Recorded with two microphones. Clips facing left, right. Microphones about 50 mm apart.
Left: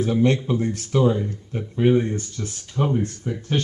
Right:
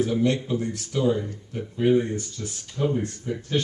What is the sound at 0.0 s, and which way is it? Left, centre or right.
Speech, left.